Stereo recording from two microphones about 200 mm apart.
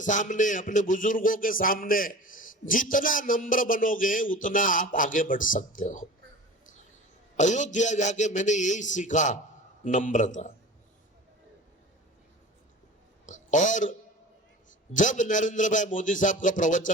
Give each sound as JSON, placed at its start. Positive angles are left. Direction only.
{"t": 0.0, "sound": "speech", "side_deg": 40}
{"t": 7.3, "sound": "speech", "side_deg": 35}
{"t": 13.2, "sound": "a sound", "side_deg": 40}
{"t": 14.9, "sound": "speech", "side_deg": 40}